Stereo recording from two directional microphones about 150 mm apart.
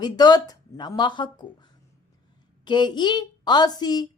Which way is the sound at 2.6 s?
30° left (ahead or behind).